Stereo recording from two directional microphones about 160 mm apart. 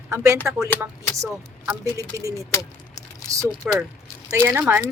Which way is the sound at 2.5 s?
25° left (ahead or behind).